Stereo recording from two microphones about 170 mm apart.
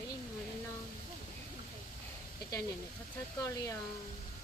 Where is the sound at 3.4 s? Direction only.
20° left (ahead or behind).